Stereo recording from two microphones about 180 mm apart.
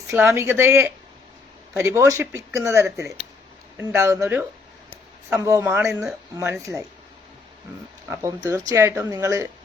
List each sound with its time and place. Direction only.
0.1 s speech: 15° right (ahead or behind)
8.2 s speech: 15° right (ahead or behind)